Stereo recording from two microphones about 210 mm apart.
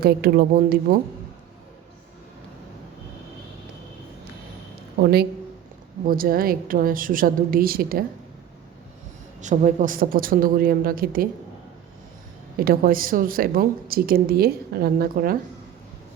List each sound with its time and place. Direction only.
0.0 s speech: 45° right (ahead or behind)
6.1 s speech: 45° right (ahead or behind)
9.4 s speech: 35° right (ahead or behind)
12.5 s speech: 45° right (ahead or behind)